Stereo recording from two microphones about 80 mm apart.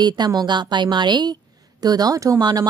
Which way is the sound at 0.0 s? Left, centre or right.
Right.